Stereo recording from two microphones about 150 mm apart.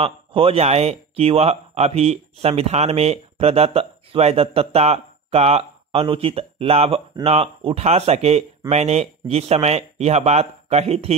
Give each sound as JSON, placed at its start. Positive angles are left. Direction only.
{"t": 0.0, "sound": "speech", "side_deg": -40}